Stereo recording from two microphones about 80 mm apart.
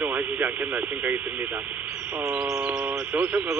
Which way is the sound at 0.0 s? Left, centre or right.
Centre.